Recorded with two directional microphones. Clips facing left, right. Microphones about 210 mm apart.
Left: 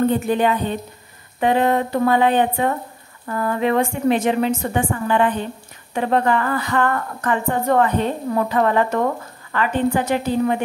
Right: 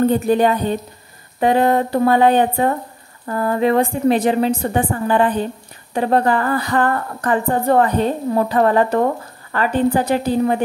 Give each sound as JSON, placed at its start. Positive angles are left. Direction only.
{"t": 0.1, "sound": "speech", "side_deg": -40}